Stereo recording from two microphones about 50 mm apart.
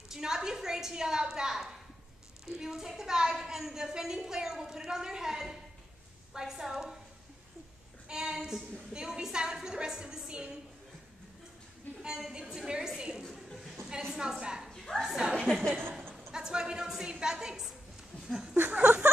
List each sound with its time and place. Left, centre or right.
0.1 s a woman's voice: centre
8.1 s a woman's voice: centre
12.0 s a woman's voice: centre
13.2 s chuckle: centre
14.4 s a woman's voice: centre
15.4 s a woman's voice: centre
16.3 s a woman's voice: centre
18.2 s a sound: centre
18.6 s speech: right